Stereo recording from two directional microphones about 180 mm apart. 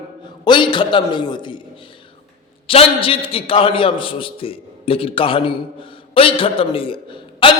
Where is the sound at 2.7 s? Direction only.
30° left (ahead or behind).